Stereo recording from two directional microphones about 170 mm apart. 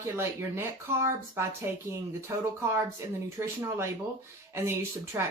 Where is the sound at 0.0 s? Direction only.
15° right (ahead or behind).